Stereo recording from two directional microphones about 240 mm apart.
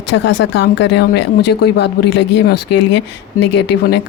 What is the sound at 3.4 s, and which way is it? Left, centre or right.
Speech, left.